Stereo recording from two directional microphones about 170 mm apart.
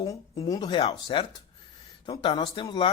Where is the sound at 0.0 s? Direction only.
20° left (ahead or behind).